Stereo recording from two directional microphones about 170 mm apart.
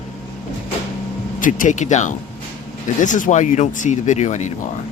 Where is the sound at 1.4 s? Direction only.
50° left (ahead or behind).